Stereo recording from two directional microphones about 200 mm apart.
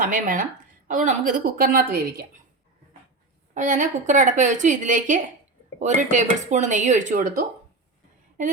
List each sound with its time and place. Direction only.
0.0 s a woman's voice: 40° right (ahead or behind)
3.5 s a woman's voice: 40° right (ahead or behind)